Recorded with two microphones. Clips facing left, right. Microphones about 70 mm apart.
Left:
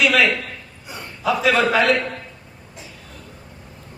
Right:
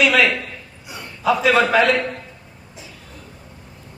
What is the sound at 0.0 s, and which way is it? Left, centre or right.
Speech, centre.